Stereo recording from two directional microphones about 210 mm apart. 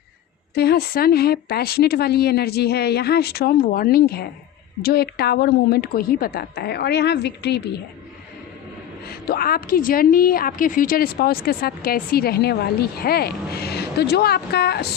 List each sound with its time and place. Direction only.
0.5 s a woman's voice: 50° left (ahead or behind)
9.0 s a woman's voice: 45° left (ahead or behind)